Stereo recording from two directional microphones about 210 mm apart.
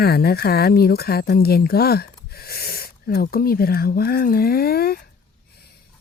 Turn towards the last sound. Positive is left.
turn(degrees=45)  # may be behind; listen again after turning